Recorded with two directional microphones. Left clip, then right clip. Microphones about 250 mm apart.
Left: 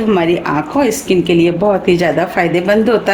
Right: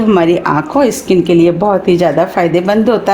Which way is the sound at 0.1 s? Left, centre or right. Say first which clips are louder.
Right 3 dB; right.